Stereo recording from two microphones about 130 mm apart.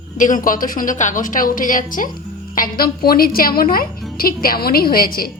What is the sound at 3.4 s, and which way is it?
A woman's voice, 90° left.